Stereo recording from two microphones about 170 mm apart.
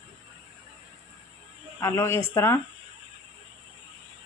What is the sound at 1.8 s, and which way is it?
Speech, 15° left (ahead or behind).